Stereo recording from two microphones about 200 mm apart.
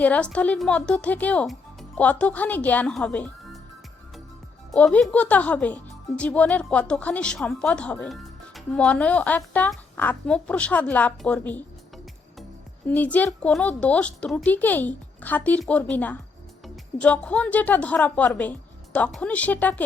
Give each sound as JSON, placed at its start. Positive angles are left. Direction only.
{"t": 0.0, "sound": "speech", "side_deg": 5}
{"t": 4.7, "sound": "speech", "side_deg": 5}
{"t": 12.9, "sound": "speech", "side_deg": 10}